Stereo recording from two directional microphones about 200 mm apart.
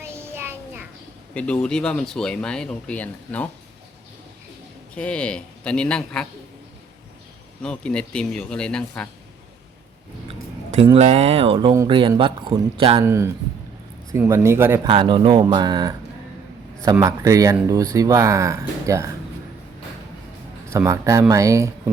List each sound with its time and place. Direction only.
0.0 s child singing: 10° right (ahead or behind)
1.3 s speech: 5° left (ahead or behind)
4.9 s speech: 5° left (ahead or behind)
7.6 s speech: 5° left (ahead or behind)
10.2 s speech: 30° right (ahead or behind)
13.1 s speech: 15° right (ahead or behind)
14.8 s speech: 25° right (ahead or behind)
20.7 s speech: 15° right (ahead or behind)